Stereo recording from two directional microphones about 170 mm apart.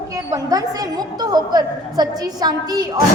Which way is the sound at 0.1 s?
20° right (ahead or behind).